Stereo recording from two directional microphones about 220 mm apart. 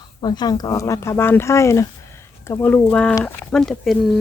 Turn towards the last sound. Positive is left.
turn(degrees=0)  # may be behind; listen again after turning